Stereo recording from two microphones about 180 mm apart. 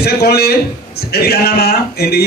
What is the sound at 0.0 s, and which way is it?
A man's voice, 60° left (ahead or behind).